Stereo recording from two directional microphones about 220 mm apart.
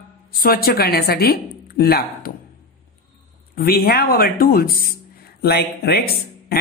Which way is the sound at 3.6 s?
45° left (ahead or behind).